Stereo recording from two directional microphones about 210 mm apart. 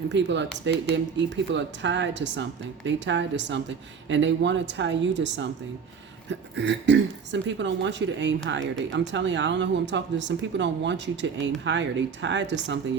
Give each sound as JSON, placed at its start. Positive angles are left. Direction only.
{"t": 0.1, "sound": "speech", "side_deg": -60}
{"t": 6.6, "sound": "speech", "side_deg": -55}